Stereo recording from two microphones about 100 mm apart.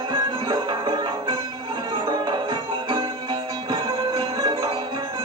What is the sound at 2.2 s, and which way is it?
Music, 60° right (ahead or behind).